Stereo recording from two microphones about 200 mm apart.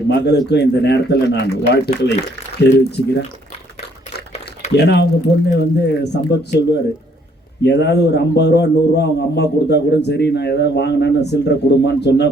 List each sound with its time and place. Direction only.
0.1 s a man's voice: 60° left (ahead or behind)
4.8 s a man's voice: 55° left (ahead or behind)